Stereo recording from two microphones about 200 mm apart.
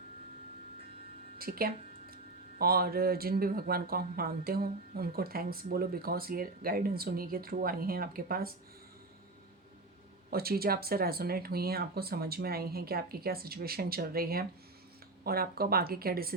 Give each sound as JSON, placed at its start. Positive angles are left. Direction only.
{"t": 1.4, "sound": "a sound", "side_deg": -45}
{"t": 2.6, "sound": "speech", "side_deg": -50}
{"t": 10.2, "sound": "speech", "side_deg": -50}